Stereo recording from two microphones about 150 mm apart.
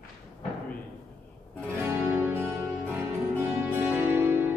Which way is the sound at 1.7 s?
15° right (ahead or behind).